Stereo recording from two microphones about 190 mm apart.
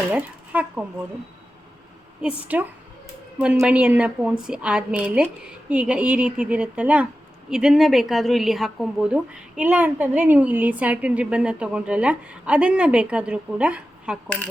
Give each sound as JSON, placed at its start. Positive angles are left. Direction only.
{"t": 0.1, "sound": "speech", "side_deg": -10}
{"t": 2.2, "sound": "a woman's voice", "side_deg": -10}
{"t": 14.3, "sound": "speech", "side_deg": 10}